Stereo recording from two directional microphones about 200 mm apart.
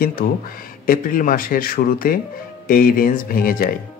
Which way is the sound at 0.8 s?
45° left (ahead or behind).